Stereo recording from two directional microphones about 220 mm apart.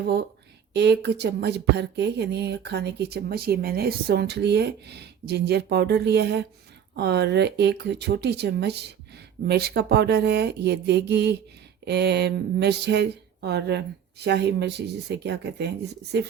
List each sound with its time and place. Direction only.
0.7 s speech: 50° right (ahead or behind)